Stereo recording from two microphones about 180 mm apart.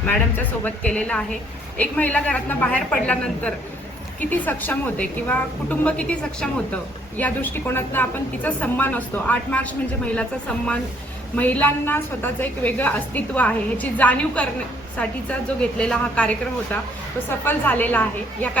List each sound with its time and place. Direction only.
0.0 s a woman's voice: 10° left (ahead or behind)
11.3 s a woman's voice: 10° left (ahead or behind)
15.8 s a woman's voice: 5° left (ahead or behind)